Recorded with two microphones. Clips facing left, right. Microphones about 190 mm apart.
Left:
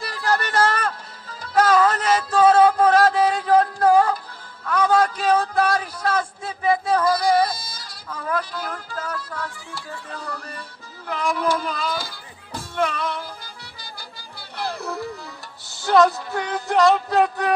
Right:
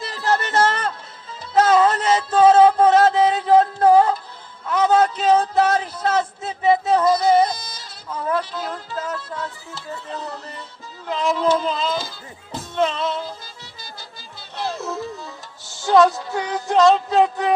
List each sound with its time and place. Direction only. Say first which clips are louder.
0.0 s music: right 2 dB; 20° right (ahead or behind)
4.6 s a man's voice: right 2 dB; 25° right (ahead or behind)
14.5 s music: right 2 dB; 20° right (ahead or behind)